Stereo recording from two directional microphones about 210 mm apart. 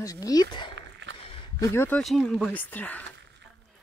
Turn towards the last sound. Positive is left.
turn(degrees=10)  # may be behind; listen again after turning